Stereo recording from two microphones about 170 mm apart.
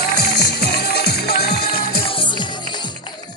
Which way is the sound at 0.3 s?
70° left (ahead or behind).